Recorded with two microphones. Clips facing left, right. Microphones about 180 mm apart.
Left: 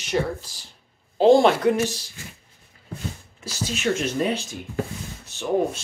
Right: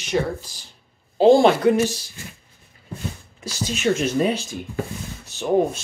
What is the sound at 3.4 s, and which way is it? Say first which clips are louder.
Speech: right 3 dB; 15° right (ahead or behind).